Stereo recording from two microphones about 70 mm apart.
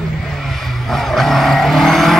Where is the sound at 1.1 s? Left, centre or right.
Centre.